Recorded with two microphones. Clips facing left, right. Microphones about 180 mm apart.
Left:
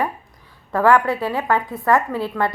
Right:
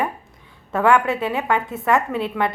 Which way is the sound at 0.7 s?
25° right (ahead or behind).